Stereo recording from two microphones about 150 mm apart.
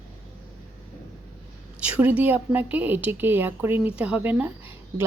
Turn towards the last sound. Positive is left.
turn(degrees=-10)  # may be behind; listen again after turning